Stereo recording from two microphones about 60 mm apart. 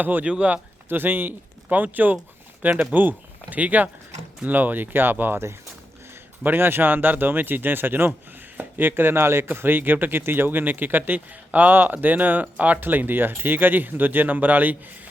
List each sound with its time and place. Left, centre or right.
0.0 s speech: right
0.9 s speech: right
6.4 s speech: right